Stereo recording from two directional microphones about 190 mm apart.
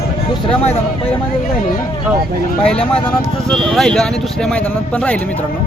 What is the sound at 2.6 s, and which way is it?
Speech, 5° left (ahead or behind).